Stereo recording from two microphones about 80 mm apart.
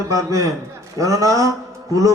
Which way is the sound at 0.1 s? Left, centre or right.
Right.